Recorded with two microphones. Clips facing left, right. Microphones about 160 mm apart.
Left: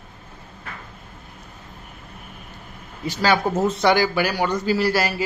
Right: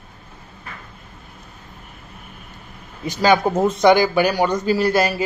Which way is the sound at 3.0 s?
15° right (ahead or behind).